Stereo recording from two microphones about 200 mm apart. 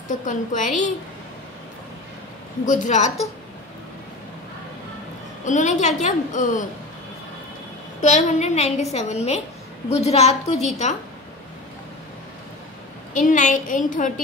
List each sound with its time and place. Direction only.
0.1 s a woman's voice: 40° left (ahead or behind)
2.6 s a woman's voice: 40° left (ahead or behind)
5.4 s a woman's voice: 40° left (ahead or behind)
8.0 s a woman's voice: 35° left (ahead or behind)
13.1 s a woman's voice: 40° left (ahead or behind)